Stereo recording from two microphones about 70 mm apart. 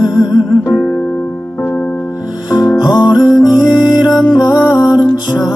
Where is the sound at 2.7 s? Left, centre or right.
Left.